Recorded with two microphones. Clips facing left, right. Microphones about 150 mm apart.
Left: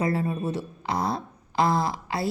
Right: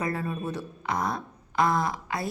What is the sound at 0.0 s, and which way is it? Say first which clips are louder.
A woman's voice: left 4 dB; 25° left (ahead or behind).